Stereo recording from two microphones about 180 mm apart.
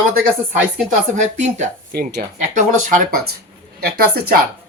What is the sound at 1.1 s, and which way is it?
Speech, 40° right (ahead or behind).